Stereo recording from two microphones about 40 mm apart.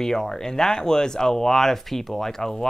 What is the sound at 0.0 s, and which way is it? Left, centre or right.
Speech, centre.